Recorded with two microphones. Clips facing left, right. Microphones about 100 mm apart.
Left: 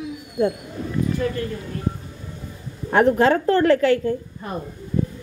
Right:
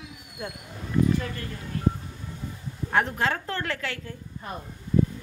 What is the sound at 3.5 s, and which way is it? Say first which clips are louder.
Speech: left 15 dB; 40° left (ahead or behind).